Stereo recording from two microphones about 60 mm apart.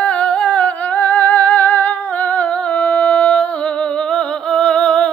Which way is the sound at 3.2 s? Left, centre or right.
Left.